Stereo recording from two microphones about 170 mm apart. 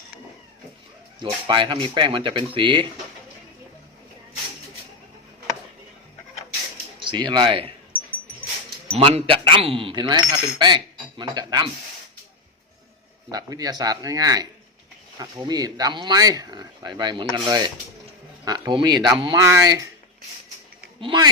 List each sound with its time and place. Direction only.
1.2 s speech: 30° right (ahead or behind)
7.0 s speech: 25° right (ahead or behind)
9.0 s speech: 35° right (ahead or behind)
13.3 s speech: 20° right (ahead or behind)
21.0 s speech: 30° right (ahead or behind)